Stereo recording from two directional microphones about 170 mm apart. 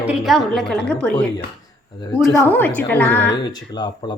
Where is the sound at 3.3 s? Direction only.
25° left (ahead or behind).